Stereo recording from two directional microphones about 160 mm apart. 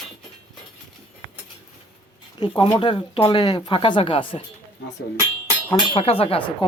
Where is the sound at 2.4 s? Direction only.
25° left (ahead or behind).